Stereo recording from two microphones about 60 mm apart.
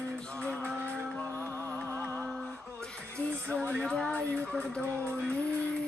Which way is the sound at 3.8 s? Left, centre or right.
Centre.